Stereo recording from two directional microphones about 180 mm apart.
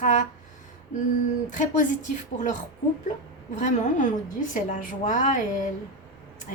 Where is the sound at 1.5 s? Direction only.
45° left (ahead or behind).